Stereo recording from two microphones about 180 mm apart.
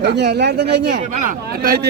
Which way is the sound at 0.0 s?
70° right (ahead or behind).